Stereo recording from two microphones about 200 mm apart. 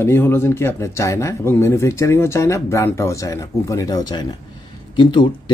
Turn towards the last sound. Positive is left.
turn(degrees=25)  # may be behind; listen again after turning